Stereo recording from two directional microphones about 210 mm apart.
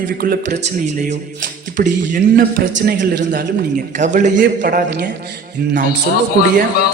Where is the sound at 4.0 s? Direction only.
35° right (ahead or behind).